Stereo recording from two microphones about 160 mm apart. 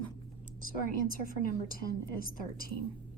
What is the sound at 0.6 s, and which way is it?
A woman's voice, 60° left (ahead or behind).